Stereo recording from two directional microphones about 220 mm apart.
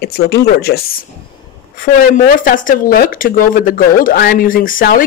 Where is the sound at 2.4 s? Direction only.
40° left (ahead or behind).